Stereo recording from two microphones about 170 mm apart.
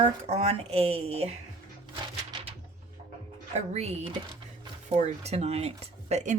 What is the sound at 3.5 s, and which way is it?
Speech, 40° right (ahead or behind).